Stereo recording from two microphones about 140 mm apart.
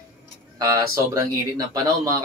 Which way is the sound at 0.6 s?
25° right (ahead or behind).